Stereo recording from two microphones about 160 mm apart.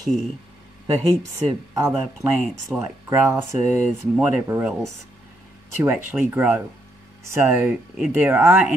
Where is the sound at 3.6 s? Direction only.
50° left (ahead or behind).